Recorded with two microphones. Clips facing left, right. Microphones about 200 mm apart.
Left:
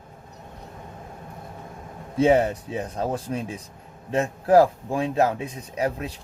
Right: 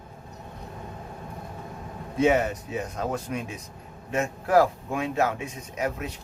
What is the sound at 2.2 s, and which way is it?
A man's voice, 30° left (ahead or behind).